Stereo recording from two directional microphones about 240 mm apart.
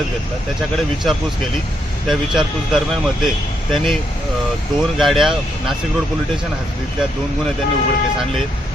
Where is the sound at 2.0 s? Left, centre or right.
Centre.